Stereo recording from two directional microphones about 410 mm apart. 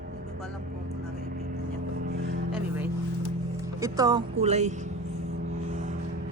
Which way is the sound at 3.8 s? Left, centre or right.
Centre.